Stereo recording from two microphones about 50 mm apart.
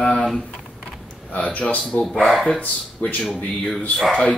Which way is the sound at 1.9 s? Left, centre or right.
Centre.